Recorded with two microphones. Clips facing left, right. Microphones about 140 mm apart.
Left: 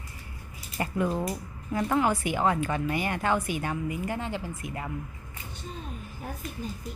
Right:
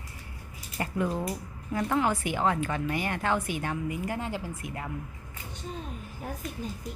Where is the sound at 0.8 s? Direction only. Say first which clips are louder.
Left 2 dB; 15° left (ahead or behind); by 4.7 s 5° right (ahead or behind).